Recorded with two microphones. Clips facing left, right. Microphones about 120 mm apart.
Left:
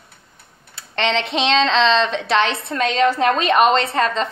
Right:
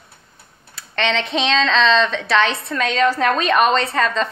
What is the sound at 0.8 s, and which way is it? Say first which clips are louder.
Speech: left 1 dB; 25° left (ahead or behind).